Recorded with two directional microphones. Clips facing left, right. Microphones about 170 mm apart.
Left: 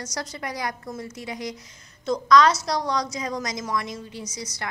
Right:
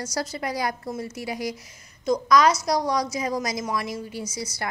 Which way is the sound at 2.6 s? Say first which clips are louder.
Right 2 dB; 25° right (ahead or behind).